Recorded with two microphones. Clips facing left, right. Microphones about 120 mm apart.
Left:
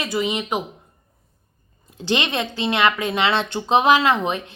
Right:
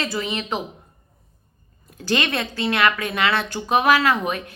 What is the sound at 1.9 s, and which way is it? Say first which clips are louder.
A woman's voice: left 1 dB; 20° left (ahead or behind).